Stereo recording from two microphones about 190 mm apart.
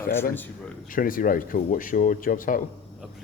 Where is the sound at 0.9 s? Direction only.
45° left (ahead or behind).